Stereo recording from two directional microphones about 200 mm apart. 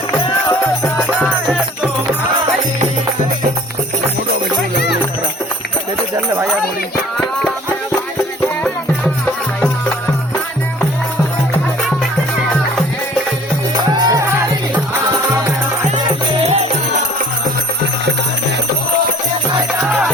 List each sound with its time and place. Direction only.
0.9 s music: centre (ahead or behind)
13.7 s music: 20° right (ahead or behind)
16.0 s music: 30° right (ahead or behind)
19.9 s music: 5° right (ahead or behind)